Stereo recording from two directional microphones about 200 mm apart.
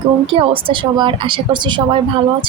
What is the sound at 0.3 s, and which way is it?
Speech, 25° right (ahead or behind).